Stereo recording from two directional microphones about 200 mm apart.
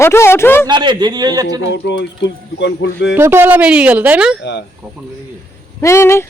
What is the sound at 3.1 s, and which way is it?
Speech, 10° right (ahead or behind).